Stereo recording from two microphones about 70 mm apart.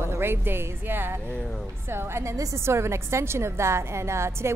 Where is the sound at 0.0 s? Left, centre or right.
Right.